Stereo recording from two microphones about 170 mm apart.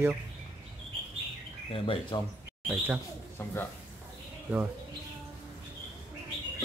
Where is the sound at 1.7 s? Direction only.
30° left (ahead or behind).